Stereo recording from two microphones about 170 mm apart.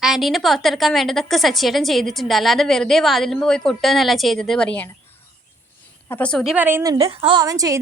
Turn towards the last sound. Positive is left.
turn(degrees=-20)  # may be behind; listen again after turning